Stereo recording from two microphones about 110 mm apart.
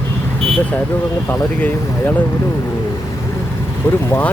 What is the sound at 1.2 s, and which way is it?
Speech, 15° left (ahead or behind).